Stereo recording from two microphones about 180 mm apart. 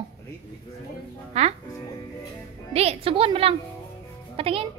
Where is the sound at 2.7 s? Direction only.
35° right (ahead or behind).